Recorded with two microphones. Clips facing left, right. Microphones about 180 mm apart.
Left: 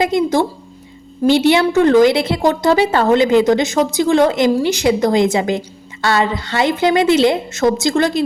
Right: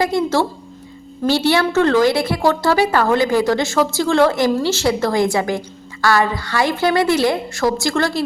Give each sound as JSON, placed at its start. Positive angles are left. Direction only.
{"t": 0.0, "sound": "a woman's voice", "side_deg": 15}